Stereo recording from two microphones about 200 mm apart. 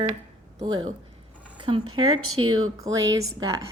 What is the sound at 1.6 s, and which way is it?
Zipper, 25° right (ahead or behind).